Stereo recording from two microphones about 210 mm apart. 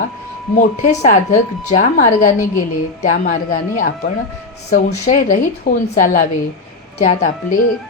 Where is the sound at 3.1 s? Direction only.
40° left (ahead or behind).